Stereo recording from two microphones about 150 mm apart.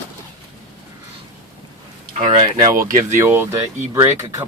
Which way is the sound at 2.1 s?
45° right (ahead or behind).